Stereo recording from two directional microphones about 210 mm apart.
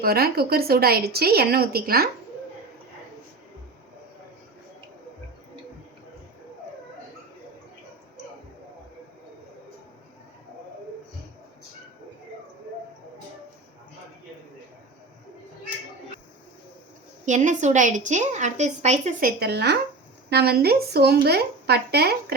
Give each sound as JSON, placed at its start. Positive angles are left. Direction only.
{"t": 0.0, "sound": "a woman's voice", "side_deg": -45}
{"t": 17.2, "sound": "a woman's voice", "side_deg": -35}
{"t": 19.4, "sound": "a woman's voice", "side_deg": -50}